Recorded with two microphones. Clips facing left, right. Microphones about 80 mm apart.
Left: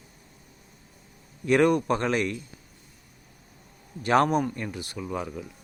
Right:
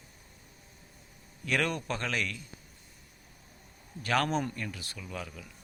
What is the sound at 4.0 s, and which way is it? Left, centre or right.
A man's voice, left.